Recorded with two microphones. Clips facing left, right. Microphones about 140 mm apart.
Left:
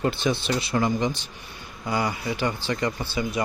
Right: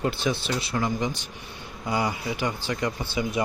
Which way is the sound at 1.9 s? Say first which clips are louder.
Even; 20° right (ahead or behind).